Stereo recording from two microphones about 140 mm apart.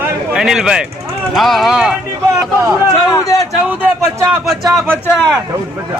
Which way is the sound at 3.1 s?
25° left (ahead or behind).